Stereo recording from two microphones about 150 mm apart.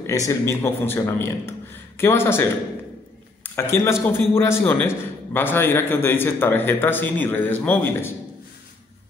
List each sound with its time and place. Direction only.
0.0 s a man's voice: 20° left (ahead or behind)
3.5 s a man's voice: 20° left (ahead or behind)